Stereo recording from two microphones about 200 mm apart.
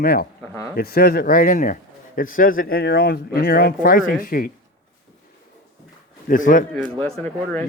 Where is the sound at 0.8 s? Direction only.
50° left (ahead or behind).